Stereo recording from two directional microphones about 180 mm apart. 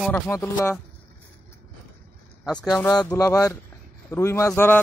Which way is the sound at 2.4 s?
Centre (ahead or behind).